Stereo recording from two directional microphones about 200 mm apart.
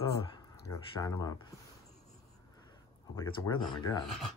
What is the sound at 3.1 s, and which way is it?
Speech, 15° left (ahead or behind).